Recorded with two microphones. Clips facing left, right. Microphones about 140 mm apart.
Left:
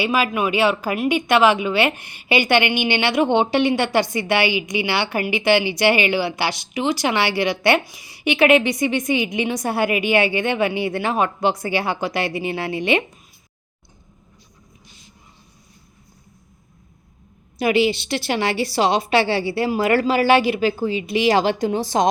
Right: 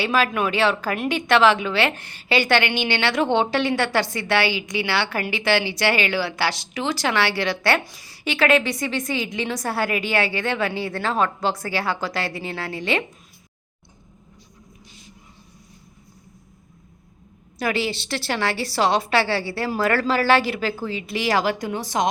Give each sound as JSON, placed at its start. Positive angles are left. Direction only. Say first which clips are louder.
{"t": 0.0, "sound": "a woman's voice", "louder": "left 1 dB", "side_deg": 10}
{"t": 17.6, "sound": "a woman's voice", "louder": "left 6 dB", "side_deg": 20}